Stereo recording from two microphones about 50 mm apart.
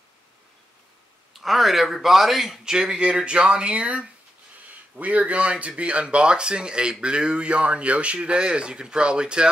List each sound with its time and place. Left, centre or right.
1.3 s a man's voice: centre